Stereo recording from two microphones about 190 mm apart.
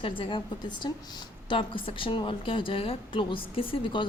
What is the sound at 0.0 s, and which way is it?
A woman's voice, 25° left (ahead or behind).